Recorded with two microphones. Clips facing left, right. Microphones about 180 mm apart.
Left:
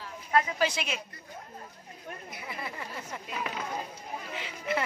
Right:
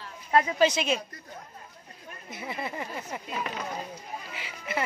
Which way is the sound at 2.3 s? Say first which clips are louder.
Right 7 dB; 25° right (ahead or behind).